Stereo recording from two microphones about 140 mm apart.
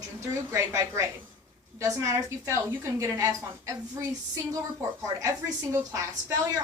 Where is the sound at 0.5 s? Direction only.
20° right (ahead or behind).